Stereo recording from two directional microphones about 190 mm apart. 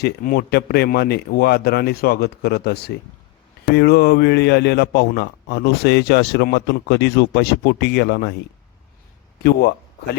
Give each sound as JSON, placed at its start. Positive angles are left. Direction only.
{"t": 0.0, "sound": "a man's voice", "side_deg": 55}
{"t": 9.4, "sound": "a man's voice", "side_deg": 55}